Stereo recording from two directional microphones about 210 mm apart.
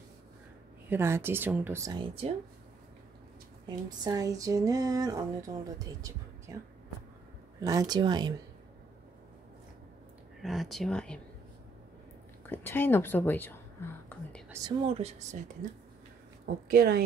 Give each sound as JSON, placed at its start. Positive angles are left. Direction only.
{"t": 0.8, "sound": "a sound", "side_deg": -10}
{"t": 3.6, "sound": "a sound", "side_deg": -15}
{"t": 7.6, "sound": "speech", "side_deg": -15}
{"t": 10.4, "sound": "speech", "side_deg": 0}
{"t": 12.4, "sound": "a woman's voice", "side_deg": 10}
{"t": 14.9, "sound": "speech", "side_deg": -30}
{"t": 16.6, "sound": "a woman's voice", "side_deg": -45}